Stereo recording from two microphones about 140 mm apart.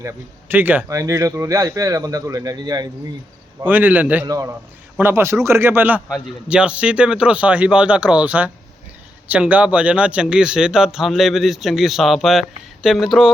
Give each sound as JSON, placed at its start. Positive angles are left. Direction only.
{"t": 0.0, "sound": "speech", "side_deg": -15}
{"t": 3.6, "sound": "speech", "side_deg": -15}
{"t": 4.3, "sound": "speech", "side_deg": -25}